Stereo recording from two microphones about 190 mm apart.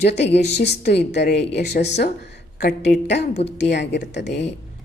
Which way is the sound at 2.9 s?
65° left (ahead or behind).